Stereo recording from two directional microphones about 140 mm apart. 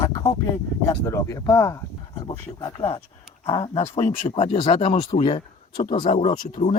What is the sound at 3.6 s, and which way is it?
Speech, 45° left (ahead or behind).